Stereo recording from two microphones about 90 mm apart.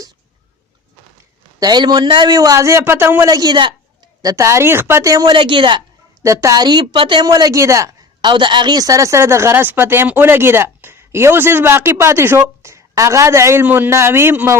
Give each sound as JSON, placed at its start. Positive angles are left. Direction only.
{"t": 1.5, "sound": "a man's voice", "side_deg": -50}
{"t": 3.2, "sound": "speech", "side_deg": -40}
{"t": 3.5, "sound": "a woman's voice", "side_deg": -60}
{"t": 4.2, "sound": "speech", "side_deg": -40}
{"t": 5.2, "sound": "a woman's voice", "side_deg": -65}
{"t": 6.2, "sound": "a man's voice", "side_deg": -35}
{"t": 6.9, "sound": "a man's voice", "side_deg": -70}
{"t": 8.2, "sound": "a man's voice", "side_deg": -60}
{"t": 13.7, "sound": "a man's voice", "side_deg": -20}